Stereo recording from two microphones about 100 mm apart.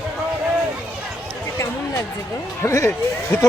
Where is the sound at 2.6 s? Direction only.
30° left (ahead or behind).